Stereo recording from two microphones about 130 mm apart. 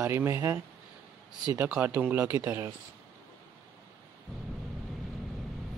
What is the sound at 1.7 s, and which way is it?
Speech, 10° right (ahead or behind).